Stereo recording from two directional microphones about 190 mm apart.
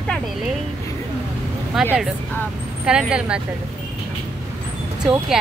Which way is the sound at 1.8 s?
5° right (ahead or behind).